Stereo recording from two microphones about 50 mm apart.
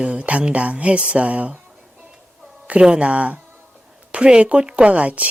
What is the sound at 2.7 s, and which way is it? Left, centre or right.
A woman's voice, right.